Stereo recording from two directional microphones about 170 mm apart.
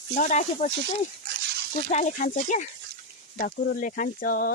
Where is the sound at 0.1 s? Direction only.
45° left (ahead or behind).